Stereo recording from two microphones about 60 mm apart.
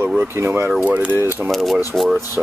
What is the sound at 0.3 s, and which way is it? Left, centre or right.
Speech, right.